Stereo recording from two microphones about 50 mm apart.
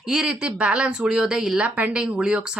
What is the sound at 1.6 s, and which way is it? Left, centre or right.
Speech, right.